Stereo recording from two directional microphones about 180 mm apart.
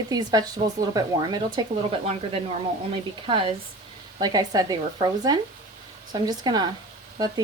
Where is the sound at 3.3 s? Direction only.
30° right (ahead or behind).